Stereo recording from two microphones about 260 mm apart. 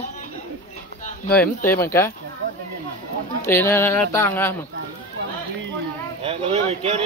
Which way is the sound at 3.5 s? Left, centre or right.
Centre.